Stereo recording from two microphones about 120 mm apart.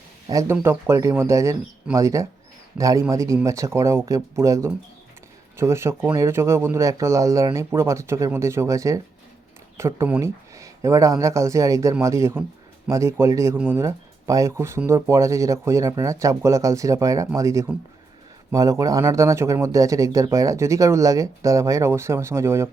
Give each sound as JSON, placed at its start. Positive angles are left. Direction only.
{"t": 0.3, "sound": "speech", "side_deg": -30}